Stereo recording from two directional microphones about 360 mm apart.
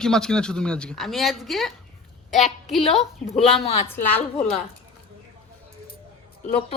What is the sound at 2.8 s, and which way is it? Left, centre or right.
Speech, centre.